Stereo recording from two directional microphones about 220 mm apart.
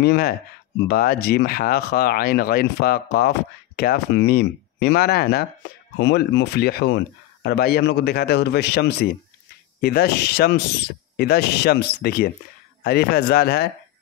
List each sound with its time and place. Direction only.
0.0 s speech: 45° left (ahead or behind)